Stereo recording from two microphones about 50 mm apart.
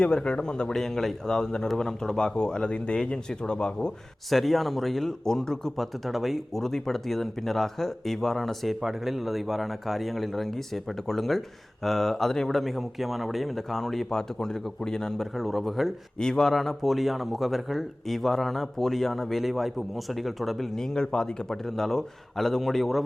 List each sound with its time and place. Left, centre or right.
0.0 s a man's voice: centre
4.3 s a man's voice: centre
8.8 s a man's voice: centre
15.4 s a man's voice: centre